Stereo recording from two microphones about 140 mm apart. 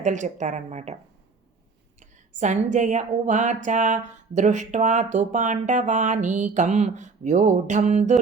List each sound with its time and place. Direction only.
0.0 s speech: 60° right (ahead or behind)
2.0 s speech: 60° right (ahead or behind)